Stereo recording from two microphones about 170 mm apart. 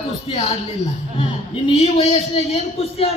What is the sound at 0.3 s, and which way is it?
A man's voice, 35° left (ahead or behind).